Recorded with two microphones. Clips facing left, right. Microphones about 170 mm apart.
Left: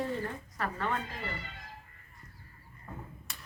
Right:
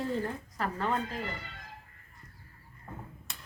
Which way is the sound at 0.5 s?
30° right (ahead or behind).